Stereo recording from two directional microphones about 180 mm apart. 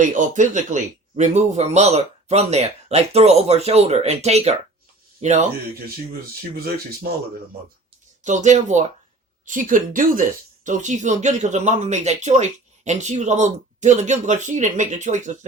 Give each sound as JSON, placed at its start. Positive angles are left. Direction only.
{"t": 0.0, "sound": "speech", "side_deg": -45}
{"t": 7.1, "sound": "speech", "side_deg": -60}
{"t": 8.2, "sound": "speech", "side_deg": -40}